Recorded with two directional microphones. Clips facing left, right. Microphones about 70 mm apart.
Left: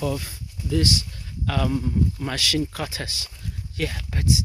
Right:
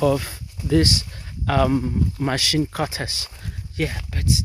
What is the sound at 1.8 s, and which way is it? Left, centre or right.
Speech, right.